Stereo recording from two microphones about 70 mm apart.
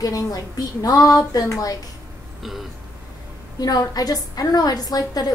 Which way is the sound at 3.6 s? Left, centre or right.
Left.